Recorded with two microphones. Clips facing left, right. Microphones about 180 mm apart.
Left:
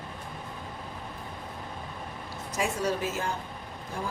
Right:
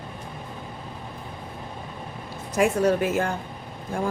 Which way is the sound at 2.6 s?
60° right (ahead or behind).